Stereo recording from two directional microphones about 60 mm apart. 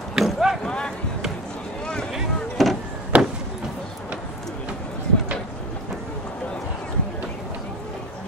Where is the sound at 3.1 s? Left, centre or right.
Right.